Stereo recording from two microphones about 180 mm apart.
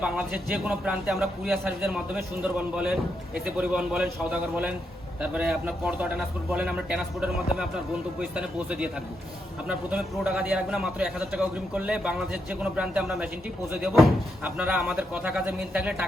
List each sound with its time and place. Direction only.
0.5 s a man's voice: 5° right (ahead or behind)